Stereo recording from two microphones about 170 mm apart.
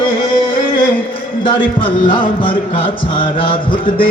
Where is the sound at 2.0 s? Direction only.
30° left (ahead or behind).